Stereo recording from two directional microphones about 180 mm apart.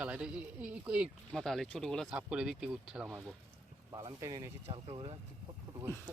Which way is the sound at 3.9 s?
20° right (ahead or behind).